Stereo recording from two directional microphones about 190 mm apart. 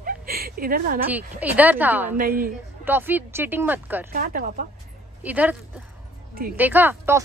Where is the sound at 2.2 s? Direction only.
50° right (ahead or behind).